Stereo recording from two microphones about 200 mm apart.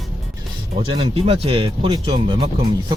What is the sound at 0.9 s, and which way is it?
Speech, 30° right (ahead or behind).